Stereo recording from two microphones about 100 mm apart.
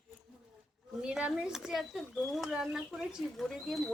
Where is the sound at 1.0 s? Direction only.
10° right (ahead or behind).